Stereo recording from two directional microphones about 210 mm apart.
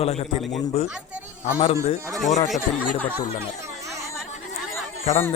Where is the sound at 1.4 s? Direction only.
35° left (ahead or behind).